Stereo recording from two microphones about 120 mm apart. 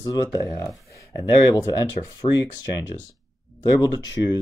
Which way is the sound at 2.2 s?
45° left (ahead or behind).